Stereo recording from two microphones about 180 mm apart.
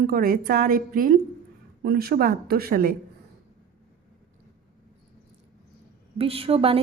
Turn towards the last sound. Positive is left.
turn(degrees=-30)  # may be behind; listen again after turning